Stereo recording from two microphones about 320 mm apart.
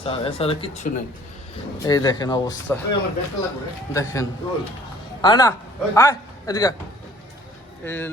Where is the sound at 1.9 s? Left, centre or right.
Centre.